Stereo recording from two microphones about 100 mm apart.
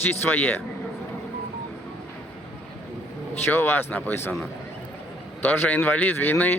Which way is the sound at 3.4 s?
25° left (ahead or behind).